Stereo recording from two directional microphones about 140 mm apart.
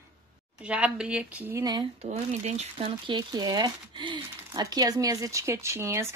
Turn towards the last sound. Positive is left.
turn(degrees=-20)  # may be behind; listen again after turning